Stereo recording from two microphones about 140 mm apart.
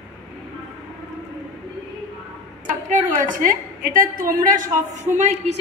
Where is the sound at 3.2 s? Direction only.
75° right (ahead or behind).